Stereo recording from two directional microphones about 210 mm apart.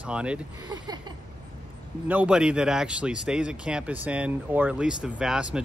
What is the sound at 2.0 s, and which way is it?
Speech, 5° right (ahead or behind).